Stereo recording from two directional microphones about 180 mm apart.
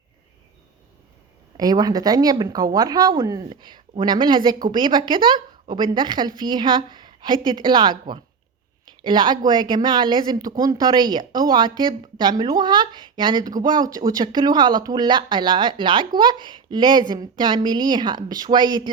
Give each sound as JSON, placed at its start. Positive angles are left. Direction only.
{"t": 1.5, "sound": "a woman's voice", "side_deg": -20}